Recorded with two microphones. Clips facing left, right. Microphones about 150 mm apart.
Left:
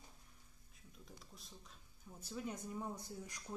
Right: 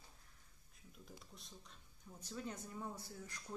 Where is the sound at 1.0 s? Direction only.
Centre (ahead or behind).